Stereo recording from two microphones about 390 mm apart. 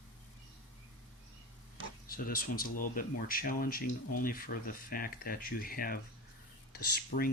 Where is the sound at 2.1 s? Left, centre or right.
Left.